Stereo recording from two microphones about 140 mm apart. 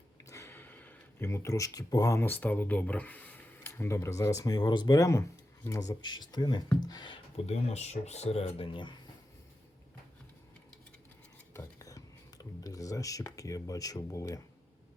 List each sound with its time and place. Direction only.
0.3 s speech: 20° left (ahead or behind); by 7.4 s 35° left (ahead or behind)
7.4 s speech: 50° left (ahead or behind)
11.5 s a sound: 25° left (ahead or behind)